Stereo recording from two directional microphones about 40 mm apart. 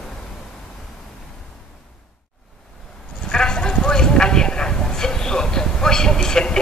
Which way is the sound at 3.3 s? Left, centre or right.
Centre.